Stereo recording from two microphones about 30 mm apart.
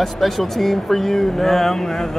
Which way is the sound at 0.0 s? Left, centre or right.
Centre.